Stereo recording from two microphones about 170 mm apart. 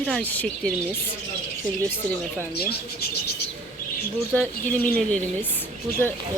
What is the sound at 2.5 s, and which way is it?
Speech, 65° left (ahead or behind).